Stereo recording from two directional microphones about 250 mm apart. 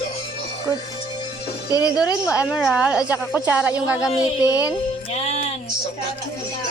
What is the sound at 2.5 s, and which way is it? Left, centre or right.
A woman's voice, centre.